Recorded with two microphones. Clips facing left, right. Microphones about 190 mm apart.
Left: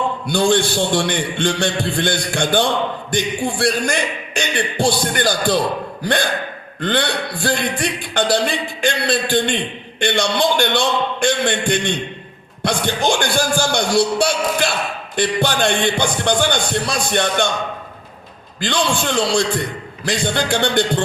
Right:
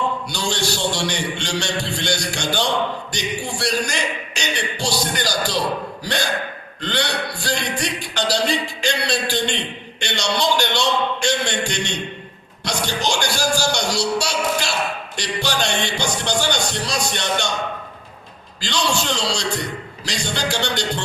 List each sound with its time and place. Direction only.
0.3 s a man's voice: 55° left (ahead or behind)
18.6 s a man's voice: 55° left (ahead or behind)